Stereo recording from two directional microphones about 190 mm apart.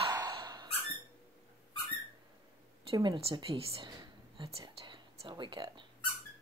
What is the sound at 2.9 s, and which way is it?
Whispering, 25° right (ahead or behind).